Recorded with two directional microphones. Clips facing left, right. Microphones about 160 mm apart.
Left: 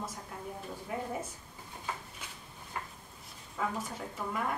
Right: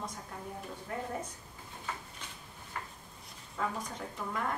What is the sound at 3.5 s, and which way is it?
Speech, 5° left (ahead or behind).